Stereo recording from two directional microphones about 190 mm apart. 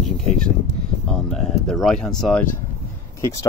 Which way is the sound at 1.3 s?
Centre (ahead or behind).